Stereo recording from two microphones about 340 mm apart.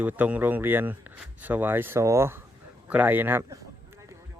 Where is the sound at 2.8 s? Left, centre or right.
Centre.